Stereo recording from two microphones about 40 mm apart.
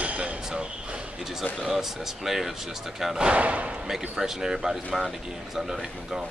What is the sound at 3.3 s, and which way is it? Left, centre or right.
Speech, right.